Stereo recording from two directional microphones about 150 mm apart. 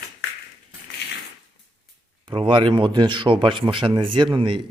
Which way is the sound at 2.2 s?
35° right (ahead or behind).